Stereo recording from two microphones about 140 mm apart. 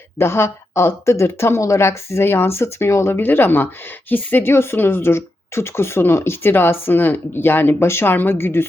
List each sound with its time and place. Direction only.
0.2 s speech: 15° left (ahead or behind)